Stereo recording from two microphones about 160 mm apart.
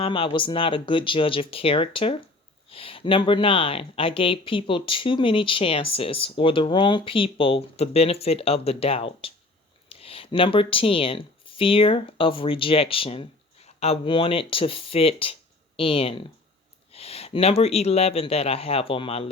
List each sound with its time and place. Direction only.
0.0 s speech: 35° left (ahead or behind)